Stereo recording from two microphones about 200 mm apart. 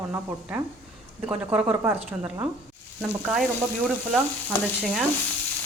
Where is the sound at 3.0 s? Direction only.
Centre (ahead or behind).